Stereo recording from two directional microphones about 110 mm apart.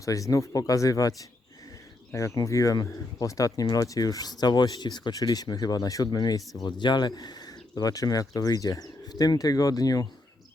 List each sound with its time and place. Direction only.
0.0 s speech: 30° left (ahead or behind)
2.1 s speech: 30° left (ahead or behind)